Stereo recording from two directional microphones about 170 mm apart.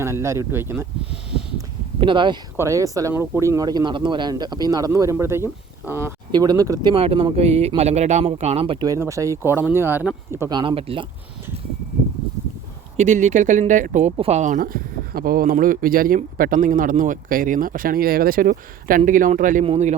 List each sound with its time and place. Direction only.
0.0 s speech: 15° right (ahead or behind)
2.0 s speech: 30° right (ahead or behind)
6.9 s speech: 35° right (ahead or behind)
8.9 s speech: 20° right (ahead or behind)
10.5 s speech: 30° right (ahead or behind)
13.0 s speech: 45° right (ahead or behind)
19.6 s speech: 40° right (ahead or behind)